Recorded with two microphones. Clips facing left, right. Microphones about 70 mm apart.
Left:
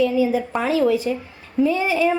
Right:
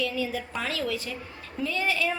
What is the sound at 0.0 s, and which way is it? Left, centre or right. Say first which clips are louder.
A woman's voice: left 11 dB; centre.